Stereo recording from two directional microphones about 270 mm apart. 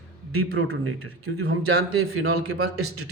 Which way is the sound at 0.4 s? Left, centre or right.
Right.